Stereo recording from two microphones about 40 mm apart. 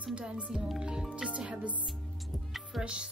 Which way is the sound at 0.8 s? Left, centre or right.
Right.